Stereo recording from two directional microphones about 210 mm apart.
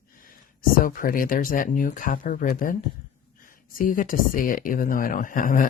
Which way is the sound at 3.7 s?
40° left (ahead or behind).